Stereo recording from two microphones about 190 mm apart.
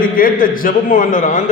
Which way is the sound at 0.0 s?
50° left (ahead or behind).